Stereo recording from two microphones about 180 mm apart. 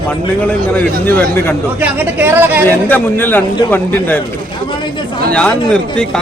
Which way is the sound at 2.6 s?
10° left (ahead or behind).